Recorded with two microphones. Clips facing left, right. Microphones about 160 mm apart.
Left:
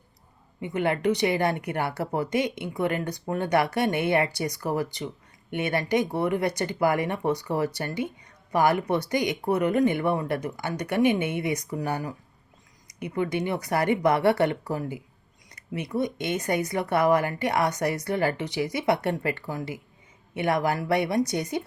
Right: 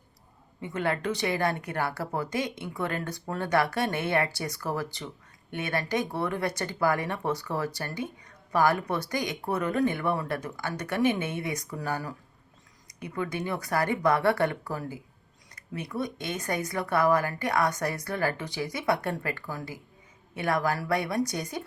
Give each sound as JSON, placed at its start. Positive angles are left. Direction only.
{"t": 0.6, "sound": "speech", "side_deg": 20}